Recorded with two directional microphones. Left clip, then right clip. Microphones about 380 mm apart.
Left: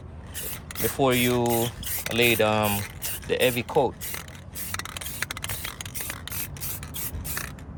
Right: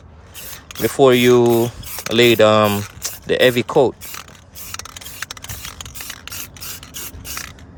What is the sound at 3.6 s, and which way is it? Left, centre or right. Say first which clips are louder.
Speech: right 8 dB; right.